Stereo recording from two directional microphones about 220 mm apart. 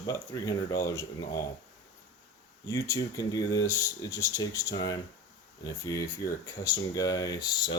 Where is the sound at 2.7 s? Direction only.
15° left (ahead or behind).